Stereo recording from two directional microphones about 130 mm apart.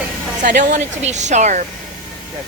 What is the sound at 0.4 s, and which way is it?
Speech, 75° right (ahead or behind).